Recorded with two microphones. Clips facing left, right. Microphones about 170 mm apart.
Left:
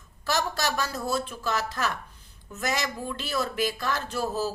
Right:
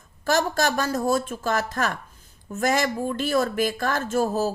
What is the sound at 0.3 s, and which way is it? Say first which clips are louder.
Speech: right 6 dB; 50° right (ahead or behind).